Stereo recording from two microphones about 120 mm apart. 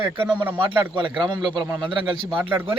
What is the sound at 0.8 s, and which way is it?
A man's voice, 45° right (ahead or behind).